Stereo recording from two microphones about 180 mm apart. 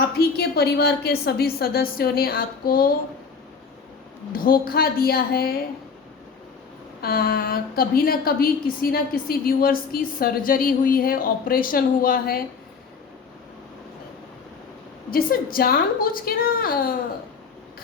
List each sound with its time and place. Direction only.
0.2 s a woman's voice: 60° left (ahead or behind)
4.3 s a woman's voice: 55° left (ahead or behind)
7.0 s a woman's voice: 55° left (ahead or behind)
15.1 s a woman's voice: 55° left (ahead or behind)